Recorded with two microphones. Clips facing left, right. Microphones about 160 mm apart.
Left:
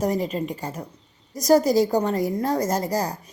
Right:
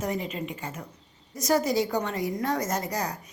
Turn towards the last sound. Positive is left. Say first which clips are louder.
# left 6 dB
turn(degrees=35)  # may be behind; listen again after turning